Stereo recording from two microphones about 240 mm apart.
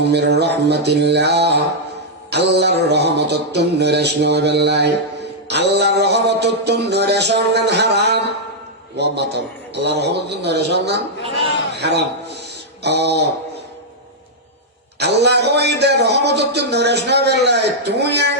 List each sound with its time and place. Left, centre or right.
0.0 s a man's voice: right
2.3 s a sound: right
9.0 s a man's voice: right
11.7 s a sound: right
12.8 s a man's voice: right
14.9 s a man's voice: right